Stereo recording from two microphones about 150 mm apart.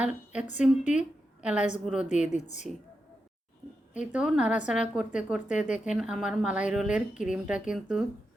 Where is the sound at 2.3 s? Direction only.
50° left (ahead or behind).